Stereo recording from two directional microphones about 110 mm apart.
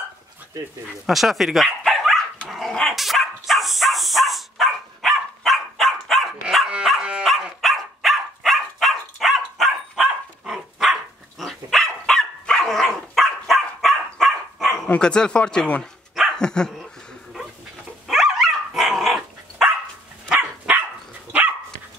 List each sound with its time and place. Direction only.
1.0 s speech: centre (ahead or behind)
2.4 s dog: centre (ahead or behind)
14.9 s speech: 10° left (ahead or behind)
16.2 s dog: 5° left (ahead or behind)
18.0 s dog: centre (ahead or behind)
20.3 s dog: 15° right (ahead or behind)